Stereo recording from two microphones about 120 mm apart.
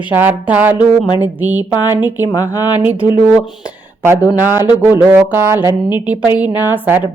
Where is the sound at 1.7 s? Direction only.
35° left (ahead or behind).